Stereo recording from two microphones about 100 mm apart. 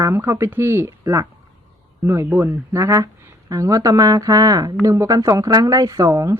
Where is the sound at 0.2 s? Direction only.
30° right (ahead or behind).